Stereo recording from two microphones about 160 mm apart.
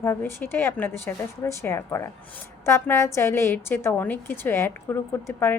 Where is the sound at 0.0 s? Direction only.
15° left (ahead or behind).